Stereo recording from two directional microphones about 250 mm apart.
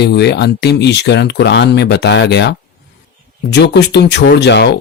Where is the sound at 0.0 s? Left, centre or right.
Left.